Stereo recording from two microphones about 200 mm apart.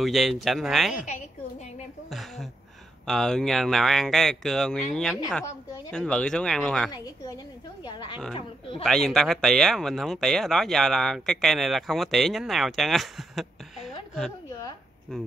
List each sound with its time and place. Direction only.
0.0 s speech: centre (ahead or behind)
2.0 s a sound: centre (ahead or behind)
3.1 s speech: centre (ahead or behind)
7.8 s a sound: 20° left (ahead or behind)
8.8 s speech: centre (ahead or behind)
15.1 s speech: centre (ahead or behind)